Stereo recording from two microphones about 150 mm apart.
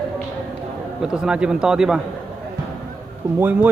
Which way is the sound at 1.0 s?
5° right (ahead or behind).